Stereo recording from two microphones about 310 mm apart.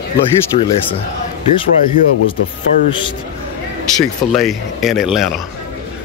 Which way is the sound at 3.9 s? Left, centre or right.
Centre.